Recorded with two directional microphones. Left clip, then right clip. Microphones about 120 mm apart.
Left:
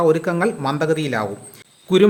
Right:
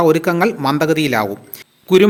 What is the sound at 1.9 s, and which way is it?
Speech, 15° right (ahead or behind).